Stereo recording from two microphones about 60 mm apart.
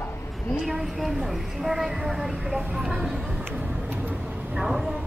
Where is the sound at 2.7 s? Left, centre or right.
Centre.